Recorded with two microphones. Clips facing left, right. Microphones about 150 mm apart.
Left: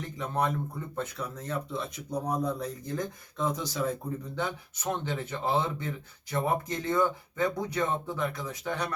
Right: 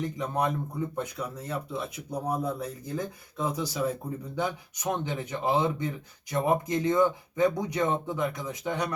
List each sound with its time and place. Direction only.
0.2 s speech: 15° right (ahead or behind)